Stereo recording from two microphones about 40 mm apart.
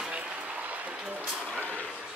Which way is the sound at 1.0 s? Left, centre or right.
Centre.